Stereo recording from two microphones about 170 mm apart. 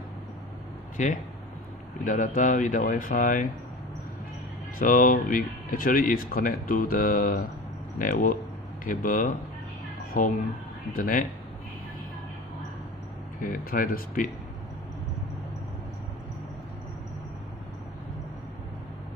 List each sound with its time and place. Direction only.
0.9 s speech: 45° left (ahead or behind)
4.8 s speech: 55° left (ahead or behind)
13.4 s speech: 55° left (ahead or behind)